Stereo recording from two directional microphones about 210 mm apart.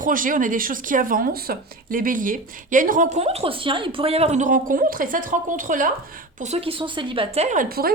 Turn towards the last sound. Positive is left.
turn(degrees=-45)  # may be behind; listen again after turning